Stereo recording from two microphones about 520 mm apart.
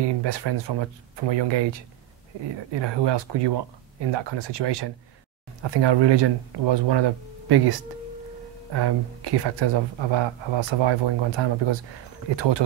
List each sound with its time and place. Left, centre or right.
0.0 s speech: right
8.7 s speech: right